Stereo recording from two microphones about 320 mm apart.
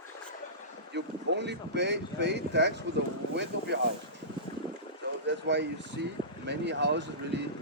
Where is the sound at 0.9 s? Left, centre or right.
Right.